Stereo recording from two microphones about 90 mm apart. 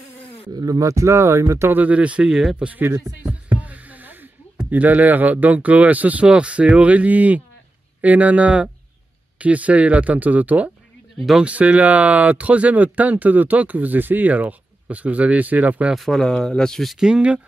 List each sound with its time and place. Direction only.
0.6 s speech: 40° right (ahead or behind)
1.8 s speech: 15° right (ahead or behind)
2.7 s speech: 20° right (ahead or behind)
11.1 s speech: centre (ahead or behind)
11.4 s speech: 15° right (ahead or behind)
15.9 s speech: 5° left (ahead or behind)